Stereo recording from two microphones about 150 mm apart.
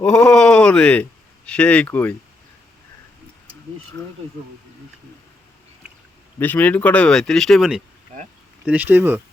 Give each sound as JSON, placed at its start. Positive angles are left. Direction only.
{"t": 0.0, "sound": "speech", "side_deg": 5}
{"t": 6.4, "sound": "speech", "side_deg": 10}